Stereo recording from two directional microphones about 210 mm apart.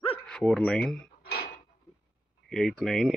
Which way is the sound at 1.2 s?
45° left (ahead or behind).